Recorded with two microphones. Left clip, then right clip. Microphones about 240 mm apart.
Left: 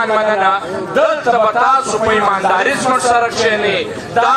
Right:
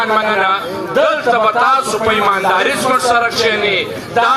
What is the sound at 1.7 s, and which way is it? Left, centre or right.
A man's voice, right.